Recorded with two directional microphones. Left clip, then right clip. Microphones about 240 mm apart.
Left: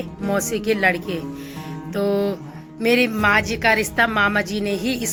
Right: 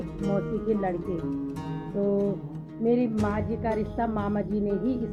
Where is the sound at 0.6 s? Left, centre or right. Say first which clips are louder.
Left 11 dB; centre.